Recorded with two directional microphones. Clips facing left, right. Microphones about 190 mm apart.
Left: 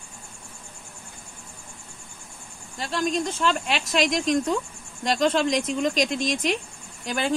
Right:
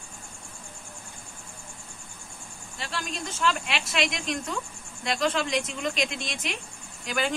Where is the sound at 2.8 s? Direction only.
40° left (ahead or behind).